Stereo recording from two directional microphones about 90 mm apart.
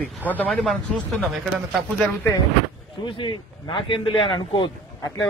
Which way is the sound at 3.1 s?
65° left (ahead or behind).